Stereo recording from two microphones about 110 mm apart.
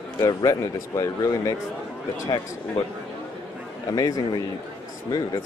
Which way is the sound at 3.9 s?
35° left (ahead or behind).